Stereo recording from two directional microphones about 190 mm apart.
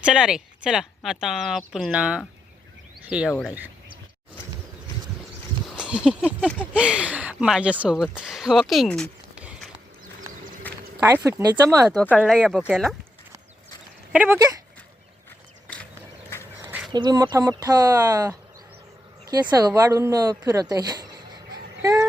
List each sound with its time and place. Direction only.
0.0 s speech: 5° right (ahead or behind)
5.6 s a sound: 5° right (ahead or behind)
6.0 s speech: 5° right (ahead or behind)
9.4 s mechanisms: 5° right (ahead or behind)
10.7 s a sound: 10° left (ahead or behind)
11.0 s speech: 15° right (ahead or behind)
11.9 s speech: 5° left (ahead or behind)
14.1 s speech: 5° right (ahead or behind)
15.6 s a sound: 5° left (ahead or behind)
16.3 s duck: 15° left (ahead or behind)
16.9 s speech: 20° right (ahead or behind)
21.8 s a sound: 20° right (ahead or behind)